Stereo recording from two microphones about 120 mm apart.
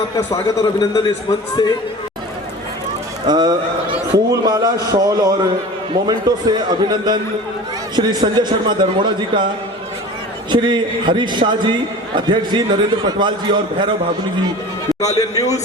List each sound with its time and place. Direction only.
0.6 s a man's voice: 35° left (ahead or behind)
3.2 s a man's voice: 35° right (ahead or behind)
10.5 s a man's voice: 40° right (ahead or behind)
15.0 s a man's voice: 30° left (ahead or behind)